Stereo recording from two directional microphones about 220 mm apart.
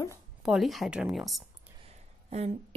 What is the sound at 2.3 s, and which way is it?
Speech, 30° right (ahead or behind).